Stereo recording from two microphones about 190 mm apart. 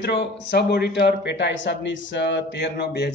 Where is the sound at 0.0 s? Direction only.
65° left (ahead or behind).